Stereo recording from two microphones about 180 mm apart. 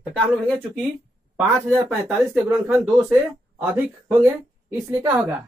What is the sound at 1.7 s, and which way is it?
Speech, 10° right (ahead or behind).